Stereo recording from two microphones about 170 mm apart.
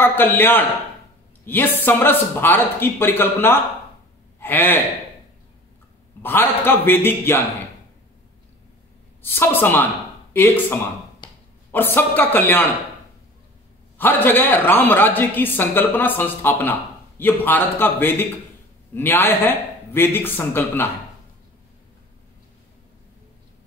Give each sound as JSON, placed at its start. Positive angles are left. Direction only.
{"t": 0.0, "sound": "a woman's voice", "side_deg": 10}
{"t": 6.2, "sound": "a woman's voice", "side_deg": 10}
{"t": 9.2, "sound": "a woman's voice", "side_deg": 15}
{"t": 11.2, "sound": "a sound", "side_deg": 30}
{"t": 11.7, "sound": "a woman's voice", "side_deg": 10}
{"t": 13.9, "sound": "a woman's voice", "side_deg": 10}